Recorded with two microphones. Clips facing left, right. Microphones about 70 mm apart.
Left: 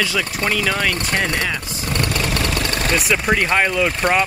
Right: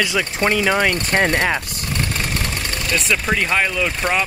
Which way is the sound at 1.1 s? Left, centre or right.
Right.